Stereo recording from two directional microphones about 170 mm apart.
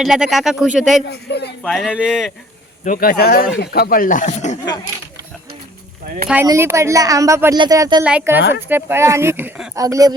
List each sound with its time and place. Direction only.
0.0 s speech: centre (ahead or behind)
1.0 s a man's voice: 75° left (ahead or behind)
1.6 s speech: centre (ahead or behind)
2.8 s speech: 55° left (ahead or behind)
6.4 s speech: 15° right (ahead or behind)
8.0 s speech: 10° right (ahead or behind)